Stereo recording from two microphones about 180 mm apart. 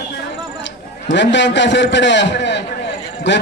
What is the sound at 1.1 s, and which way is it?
A man's voice, 80° left.